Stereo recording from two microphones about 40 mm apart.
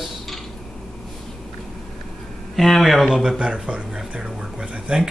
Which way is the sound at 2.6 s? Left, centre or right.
Centre.